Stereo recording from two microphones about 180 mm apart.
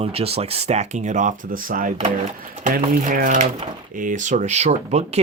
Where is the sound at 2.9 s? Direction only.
50° right (ahead or behind).